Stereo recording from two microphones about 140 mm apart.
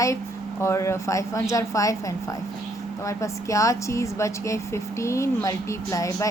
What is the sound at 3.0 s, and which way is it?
Speech, 20° left (ahead or behind).